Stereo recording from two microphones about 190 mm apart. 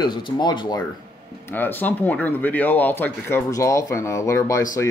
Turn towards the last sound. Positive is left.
turn(degrees=15)  # may be behind; listen again after turning